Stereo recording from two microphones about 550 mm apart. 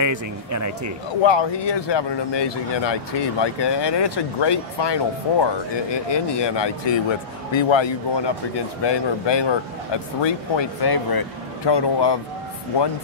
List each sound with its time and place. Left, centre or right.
0.0 s speech: right
1.2 s speech: left